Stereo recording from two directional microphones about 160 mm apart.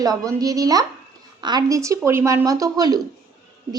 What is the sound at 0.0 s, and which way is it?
Speech, 25° right (ahead or behind).